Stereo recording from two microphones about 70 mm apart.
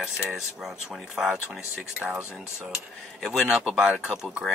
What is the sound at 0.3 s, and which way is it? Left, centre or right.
Speech, centre.